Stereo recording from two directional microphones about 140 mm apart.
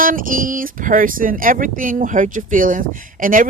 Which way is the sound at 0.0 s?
80° right.